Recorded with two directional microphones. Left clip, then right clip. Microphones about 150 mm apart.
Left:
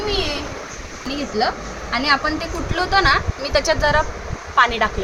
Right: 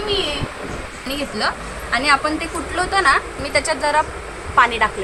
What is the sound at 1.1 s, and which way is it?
Speech, 40° right (ahead or behind).